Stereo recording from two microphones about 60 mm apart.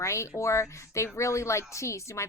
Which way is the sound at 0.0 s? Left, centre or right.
Left.